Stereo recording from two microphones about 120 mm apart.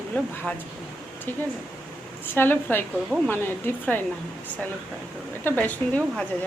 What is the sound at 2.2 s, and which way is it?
Speech, 15° left (ahead or behind).